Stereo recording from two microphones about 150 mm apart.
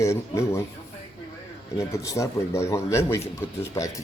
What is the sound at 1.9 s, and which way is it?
Speech, 20° left (ahead or behind).